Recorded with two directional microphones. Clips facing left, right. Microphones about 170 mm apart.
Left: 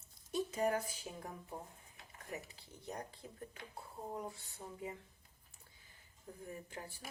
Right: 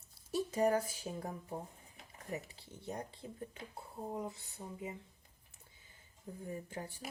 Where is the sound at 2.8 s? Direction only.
25° right (ahead or behind).